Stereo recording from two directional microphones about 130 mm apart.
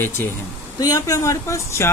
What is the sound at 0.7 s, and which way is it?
Speech, 30° left (ahead or behind).